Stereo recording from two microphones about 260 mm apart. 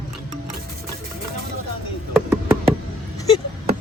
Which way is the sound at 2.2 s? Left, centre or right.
Centre.